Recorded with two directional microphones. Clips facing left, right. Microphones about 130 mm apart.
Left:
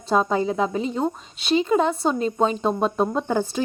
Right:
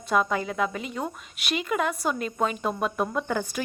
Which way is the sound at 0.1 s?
30° left (ahead or behind).